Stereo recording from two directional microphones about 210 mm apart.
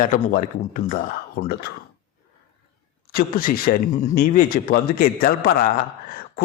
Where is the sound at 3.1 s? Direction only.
45° left (ahead or behind).